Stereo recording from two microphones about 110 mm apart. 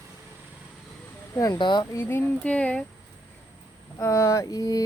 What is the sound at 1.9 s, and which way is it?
Speech, 20° left (ahead or behind).